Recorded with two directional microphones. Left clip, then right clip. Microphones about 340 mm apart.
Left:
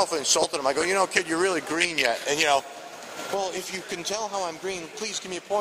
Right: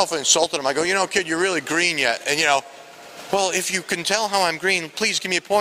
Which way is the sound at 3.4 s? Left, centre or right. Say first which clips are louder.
Right 8 dB; right.